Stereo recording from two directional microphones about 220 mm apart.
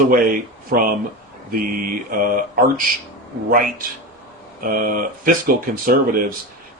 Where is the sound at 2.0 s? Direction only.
40° right (ahead or behind).